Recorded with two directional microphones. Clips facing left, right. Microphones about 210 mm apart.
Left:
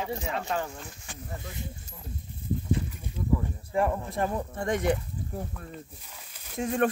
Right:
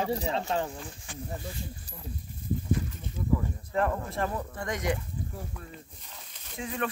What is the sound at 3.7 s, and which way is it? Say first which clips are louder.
Speech: left 2 dB; 10° left (ahead or behind).